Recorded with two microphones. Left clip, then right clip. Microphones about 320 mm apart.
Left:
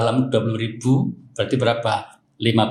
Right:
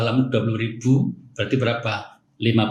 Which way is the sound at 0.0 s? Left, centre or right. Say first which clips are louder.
Left 2 dB; centre.